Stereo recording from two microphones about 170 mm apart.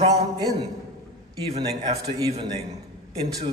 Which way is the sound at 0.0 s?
25° right (ahead or behind).